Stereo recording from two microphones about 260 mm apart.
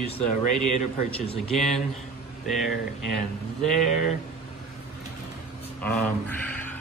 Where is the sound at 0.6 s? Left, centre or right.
Left.